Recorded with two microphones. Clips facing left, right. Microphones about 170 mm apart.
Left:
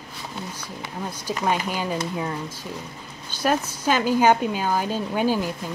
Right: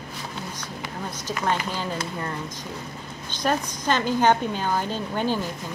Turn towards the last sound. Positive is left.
turn(degrees=10)  # may be behind; listen again after turning